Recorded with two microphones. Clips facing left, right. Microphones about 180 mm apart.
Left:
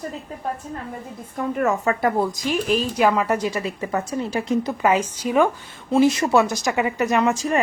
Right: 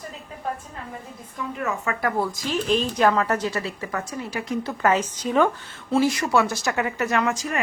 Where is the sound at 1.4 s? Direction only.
55° left (ahead or behind).